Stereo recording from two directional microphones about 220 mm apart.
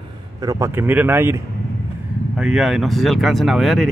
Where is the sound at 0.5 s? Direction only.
10° right (ahead or behind).